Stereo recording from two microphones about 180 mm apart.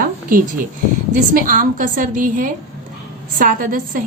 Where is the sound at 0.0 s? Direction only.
50° right (ahead or behind).